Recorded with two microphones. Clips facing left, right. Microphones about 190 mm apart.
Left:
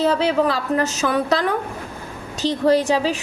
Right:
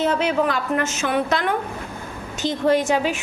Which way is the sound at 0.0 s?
35° left (ahead or behind).